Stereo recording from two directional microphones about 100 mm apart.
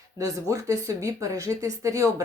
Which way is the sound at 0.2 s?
35° right (ahead or behind).